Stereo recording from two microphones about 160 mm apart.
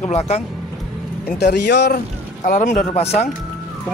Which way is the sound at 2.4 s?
55° left (ahead or behind).